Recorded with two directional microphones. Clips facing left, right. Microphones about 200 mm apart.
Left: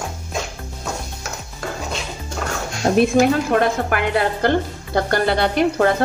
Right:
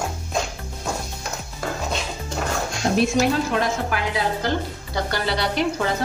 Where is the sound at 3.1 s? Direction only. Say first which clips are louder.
Left 5 dB; 55° left (ahead or behind).